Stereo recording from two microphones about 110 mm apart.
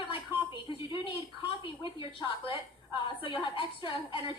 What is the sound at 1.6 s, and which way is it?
A woman's voice, 50° left (ahead or behind).